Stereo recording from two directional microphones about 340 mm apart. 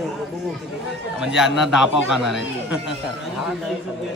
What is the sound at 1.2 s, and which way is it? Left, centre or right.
A man's voice, centre.